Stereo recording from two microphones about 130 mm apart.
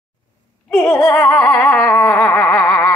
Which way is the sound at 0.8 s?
25° left (ahead or behind).